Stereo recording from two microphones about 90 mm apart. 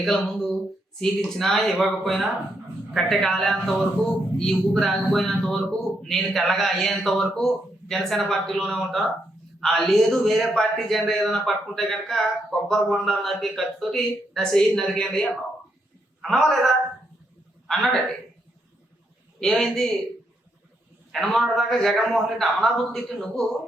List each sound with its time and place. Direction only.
0.0 s a man's voice: 5° left (ahead or behind)
19.4 s a man's voice: 5° left (ahead or behind)
21.1 s a man's voice: centre (ahead or behind)